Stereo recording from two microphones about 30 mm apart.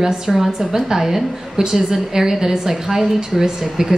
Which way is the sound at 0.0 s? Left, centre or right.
Centre.